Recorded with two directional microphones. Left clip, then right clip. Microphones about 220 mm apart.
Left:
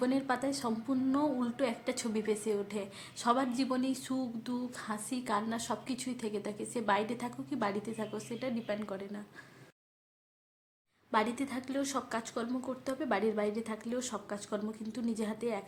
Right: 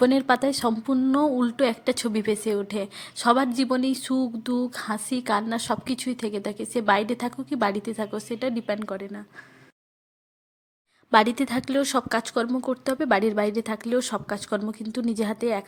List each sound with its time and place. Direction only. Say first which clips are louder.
0.0 s speech: right 12 dB; 40° right (ahead or behind)
11.1 s speech: right 12 dB; 40° right (ahead or behind)